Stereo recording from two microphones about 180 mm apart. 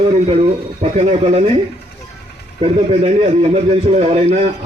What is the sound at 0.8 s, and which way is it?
Speech, 40° right (ahead or behind).